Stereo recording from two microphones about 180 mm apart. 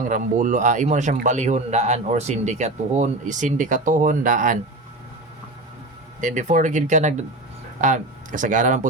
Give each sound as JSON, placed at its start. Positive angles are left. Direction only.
{"t": 0.1, "sound": "a man's voice", "side_deg": -45}
{"t": 6.1, "sound": "a man's voice", "side_deg": -45}